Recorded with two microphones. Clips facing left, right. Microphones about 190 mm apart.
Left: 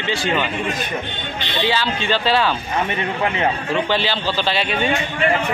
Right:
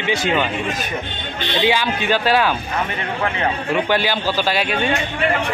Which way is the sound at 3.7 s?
10° right (ahead or behind).